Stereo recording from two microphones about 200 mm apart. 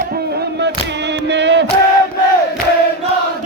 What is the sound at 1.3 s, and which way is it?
Music, 60° right (ahead or behind).